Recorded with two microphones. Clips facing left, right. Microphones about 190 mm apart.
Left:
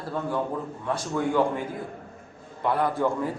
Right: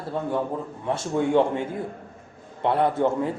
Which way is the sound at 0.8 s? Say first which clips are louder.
Right 3 dB; 25° right (ahead or behind).